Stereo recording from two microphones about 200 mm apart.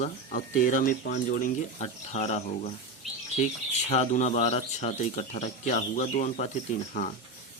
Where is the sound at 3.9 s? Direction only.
35° left (ahead or behind).